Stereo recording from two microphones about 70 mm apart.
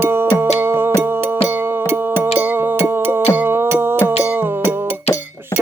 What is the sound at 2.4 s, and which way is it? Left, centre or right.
Music, right.